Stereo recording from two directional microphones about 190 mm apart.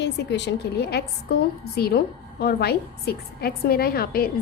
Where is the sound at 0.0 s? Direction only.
65° left (ahead or behind).